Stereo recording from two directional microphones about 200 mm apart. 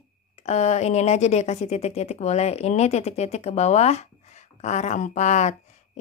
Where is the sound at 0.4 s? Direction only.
35° left (ahead or behind).